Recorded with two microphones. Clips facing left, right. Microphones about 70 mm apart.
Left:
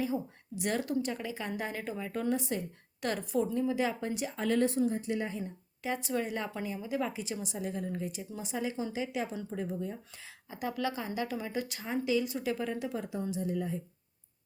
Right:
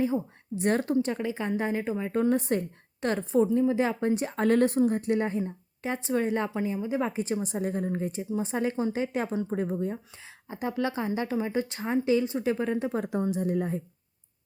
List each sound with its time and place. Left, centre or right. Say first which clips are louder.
0.0 s a woman's voice: right 6 dB; right
2.3 s a woman's voice: right 7 dB; right
3.0 s a woman's voice: right 7 dB; right
5.4 s a woman's voice: right 7 dB; right
6.5 s a woman's voice: right 6 dB; right
7.1 s a woman's voice: right 8 dB; right
10.2 s a woman's voice: right 4 dB; right
12.8 s a woman's voice: right 7 dB; right